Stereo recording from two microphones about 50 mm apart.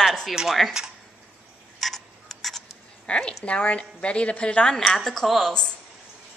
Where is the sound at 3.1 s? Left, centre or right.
Left.